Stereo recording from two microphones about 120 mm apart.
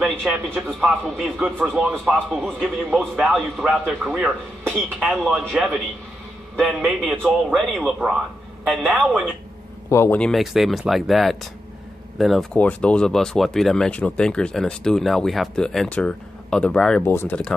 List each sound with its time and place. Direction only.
0.0 s a man's voice: centre (ahead or behind)
9.8 s speech: 20° left (ahead or behind)
10.1 s a man's voice: 5° left (ahead or behind)
12.5 s speech: 10° left (ahead or behind)
17.0 s speech: 20° left (ahead or behind)